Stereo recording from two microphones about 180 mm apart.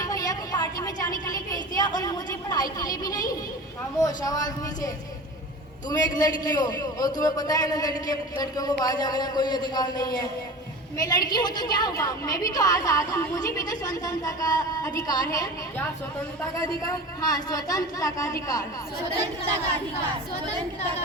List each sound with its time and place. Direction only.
0.0 s a sound: 20° left (ahead or behind)
4.0 s a woman's voice: 20° left (ahead or behind)
5.9 s a woman's voice: 20° left (ahead or behind)